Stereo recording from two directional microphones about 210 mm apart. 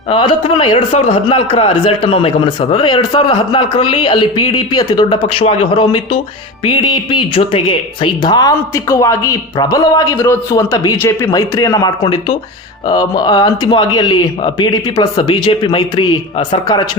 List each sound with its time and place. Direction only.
0.1 s a man's voice: 25° left (ahead or behind)